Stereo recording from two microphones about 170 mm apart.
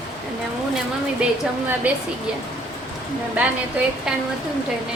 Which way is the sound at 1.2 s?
5° right (ahead or behind).